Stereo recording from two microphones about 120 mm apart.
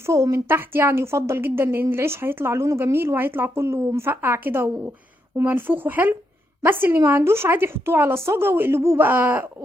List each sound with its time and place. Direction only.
0.0 s a woman's voice: 25° right (ahead or behind)